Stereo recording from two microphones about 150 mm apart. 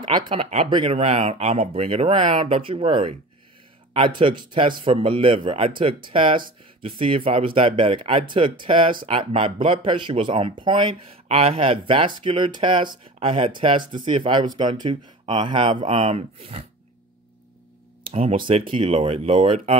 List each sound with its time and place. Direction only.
0.3 s speech: 40° right (ahead or behind)
0.9 s speech: 45° right (ahead or behind)
18.1 s speech: 40° right (ahead or behind)